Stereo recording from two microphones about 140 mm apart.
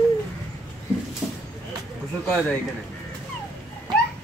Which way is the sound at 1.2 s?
Centre (ahead or behind).